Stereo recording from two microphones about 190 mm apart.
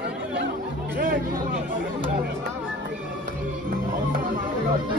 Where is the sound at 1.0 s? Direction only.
45° right (ahead or behind).